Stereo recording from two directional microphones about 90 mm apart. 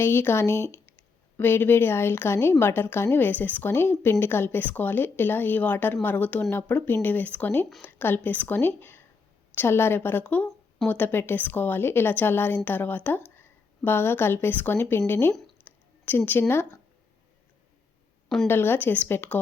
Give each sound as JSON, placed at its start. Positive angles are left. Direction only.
{"t": 0.0, "sound": "speech", "side_deg": 25}
{"t": 15.6, "sound": "a sound", "side_deg": 20}
{"t": 18.4, "sound": "speech", "side_deg": 25}